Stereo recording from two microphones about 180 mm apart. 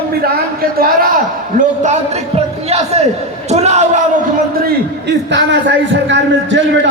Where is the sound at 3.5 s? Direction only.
40° right (ahead or behind).